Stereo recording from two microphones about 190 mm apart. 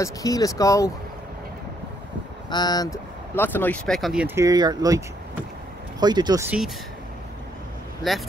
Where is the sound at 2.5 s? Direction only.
20° left (ahead or behind); by 4.2 s centre (ahead or behind).